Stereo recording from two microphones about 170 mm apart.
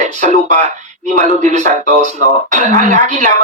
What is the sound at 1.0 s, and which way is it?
A man's voice, 45° right (ahead or behind).